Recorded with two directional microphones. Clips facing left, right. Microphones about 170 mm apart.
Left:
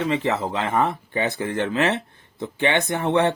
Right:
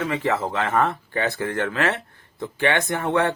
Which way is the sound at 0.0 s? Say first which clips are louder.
Left 1 dB; 25° left (ahead or behind).